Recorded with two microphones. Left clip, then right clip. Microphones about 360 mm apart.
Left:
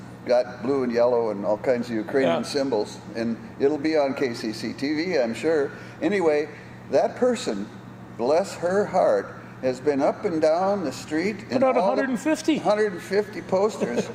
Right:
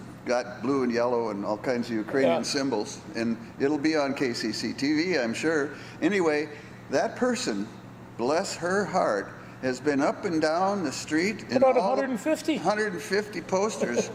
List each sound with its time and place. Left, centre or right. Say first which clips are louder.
0.3 s a man's voice: left 5 dB; right
11.6 s a man's voice: left 2 dB; left
12.6 s a man's voice: left 5 dB; right